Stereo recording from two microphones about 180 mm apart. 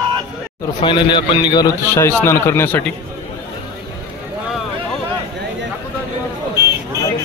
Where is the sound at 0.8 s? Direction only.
25° left (ahead or behind); by 2.9 s 10° left (ahead or behind).